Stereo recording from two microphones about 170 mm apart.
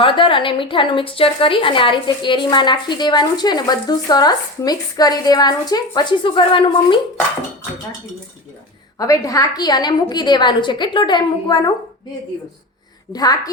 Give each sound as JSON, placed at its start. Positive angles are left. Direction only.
{"t": 0.0, "sound": "a woman's voice", "side_deg": 30}
{"t": 9.0, "sound": "a woman's voice", "side_deg": 20}
{"t": 13.1, "sound": "a woman's voice", "side_deg": 20}